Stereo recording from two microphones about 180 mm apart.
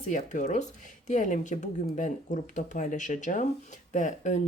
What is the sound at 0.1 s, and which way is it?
Speech, 45° left (ahead or behind).